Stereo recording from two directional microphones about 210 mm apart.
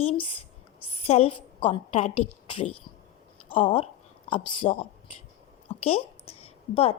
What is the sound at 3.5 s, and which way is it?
A woman's voice, 25° left (ahead or behind).